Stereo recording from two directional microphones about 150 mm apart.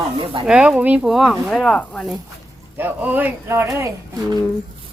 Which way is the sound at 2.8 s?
10° right (ahead or behind).